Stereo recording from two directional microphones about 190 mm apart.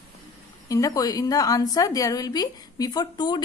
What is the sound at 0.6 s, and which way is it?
A woman's voice, 20° left (ahead or behind).